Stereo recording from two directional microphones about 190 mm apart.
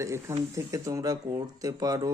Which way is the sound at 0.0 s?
15° right (ahead or behind).